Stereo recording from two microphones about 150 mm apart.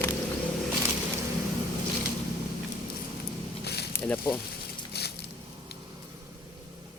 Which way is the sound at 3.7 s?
90° left.